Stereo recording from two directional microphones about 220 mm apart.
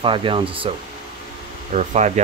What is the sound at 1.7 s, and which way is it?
Speech, 30° right (ahead or behind).